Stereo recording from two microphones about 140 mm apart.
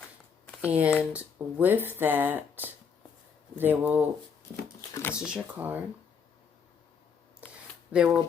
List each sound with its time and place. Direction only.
0.6 s speech: 10° right (ahead or behind)
3.6 s speech: 15° right (ahead or behind)
4.9 s a sound: 20° left (ahead or behind)
5.2 s speech: 5° right (ahead or behind)
7.9 s speech: 5° right (ahead or behind)